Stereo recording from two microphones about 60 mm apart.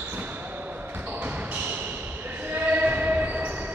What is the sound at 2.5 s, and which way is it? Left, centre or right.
Basketball bounce, right.